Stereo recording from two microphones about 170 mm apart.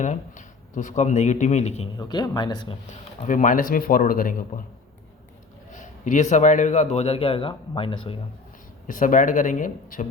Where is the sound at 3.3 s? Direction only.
50° left (ahead or behind).